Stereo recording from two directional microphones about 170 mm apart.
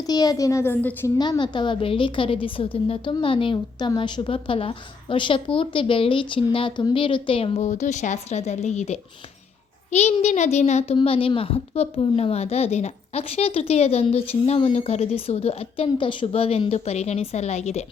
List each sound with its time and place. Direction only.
0.0 s a woman's voice: 20° left (ahead or behind)
1.2 s a woman's voice: 25° left (ahead or behind)